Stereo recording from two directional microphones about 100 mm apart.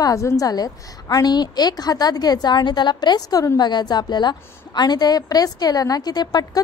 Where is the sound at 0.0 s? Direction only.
30° left (ahead or behind).